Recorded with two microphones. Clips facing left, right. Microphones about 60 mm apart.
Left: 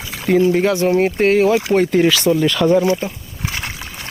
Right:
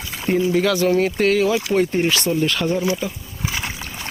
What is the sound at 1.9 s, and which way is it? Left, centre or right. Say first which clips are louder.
Speech: left 5 dB; left.